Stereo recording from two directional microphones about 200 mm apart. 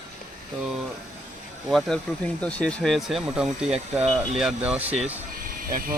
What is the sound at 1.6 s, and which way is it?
Speech, centre (ahead or behind).